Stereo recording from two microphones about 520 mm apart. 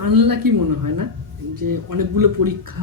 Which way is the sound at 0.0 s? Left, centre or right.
Right.